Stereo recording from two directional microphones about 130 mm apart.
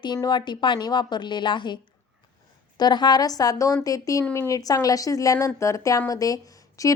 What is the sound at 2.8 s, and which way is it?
Speech, 35° left (ahead or behind).